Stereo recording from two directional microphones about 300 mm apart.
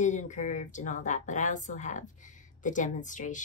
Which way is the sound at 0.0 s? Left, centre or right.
Left.